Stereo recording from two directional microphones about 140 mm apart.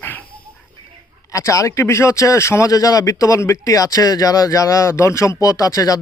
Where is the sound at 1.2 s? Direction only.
25° left (ahead or behind).